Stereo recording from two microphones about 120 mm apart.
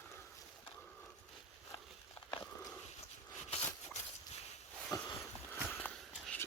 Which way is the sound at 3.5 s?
70° left (ahead or behind).